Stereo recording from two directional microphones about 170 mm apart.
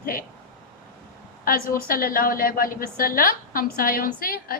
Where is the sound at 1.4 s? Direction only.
55° left (ahead or behind).